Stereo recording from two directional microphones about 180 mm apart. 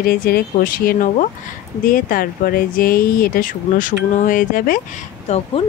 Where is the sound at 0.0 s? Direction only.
55° left (ahead or behind).